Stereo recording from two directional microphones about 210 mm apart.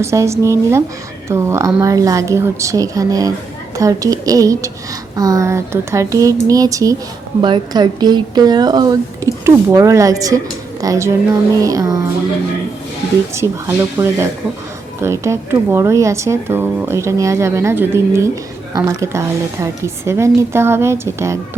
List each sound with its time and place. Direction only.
0.0 s a woman's voice: 15° right (ahead or behind)
13.3 s a woman's voice: 10° right (ahead or behind)